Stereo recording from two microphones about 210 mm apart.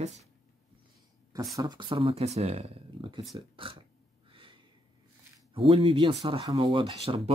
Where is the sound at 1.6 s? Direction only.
20° right (ahead or behind).